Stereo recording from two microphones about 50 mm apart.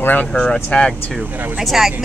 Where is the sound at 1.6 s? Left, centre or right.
Centre.